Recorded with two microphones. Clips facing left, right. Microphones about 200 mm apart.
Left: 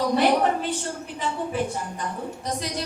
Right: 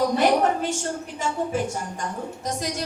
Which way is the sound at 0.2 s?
45° right (ahead or behind).